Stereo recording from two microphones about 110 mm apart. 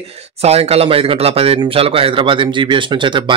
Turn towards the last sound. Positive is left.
turn(degrees=-50)  # may be behind; listen again after turning